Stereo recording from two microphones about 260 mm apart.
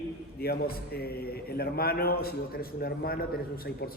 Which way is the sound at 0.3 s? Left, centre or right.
Left.